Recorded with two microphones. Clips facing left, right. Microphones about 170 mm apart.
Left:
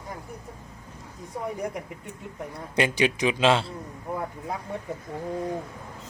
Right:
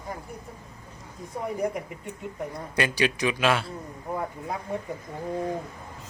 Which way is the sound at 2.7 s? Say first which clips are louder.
Left 2 dB; 20° left (ahead or behind).